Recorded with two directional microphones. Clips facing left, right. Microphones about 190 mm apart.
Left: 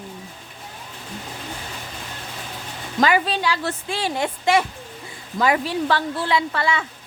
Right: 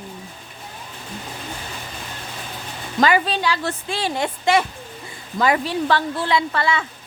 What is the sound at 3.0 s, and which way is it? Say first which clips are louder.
Speech: right 1 dB; 10° left (ahead or behind).